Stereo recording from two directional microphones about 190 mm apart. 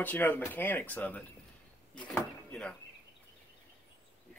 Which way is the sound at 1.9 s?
5° left (ahead or behind).